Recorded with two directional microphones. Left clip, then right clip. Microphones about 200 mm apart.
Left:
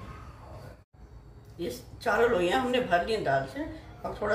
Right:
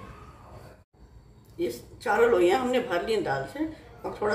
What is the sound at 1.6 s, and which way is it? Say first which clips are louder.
Speech: right 4 dB; 30° right (ahead or behind).